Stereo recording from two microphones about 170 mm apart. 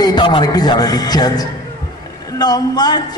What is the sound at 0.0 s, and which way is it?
Speech, 25° left (ahead or behind).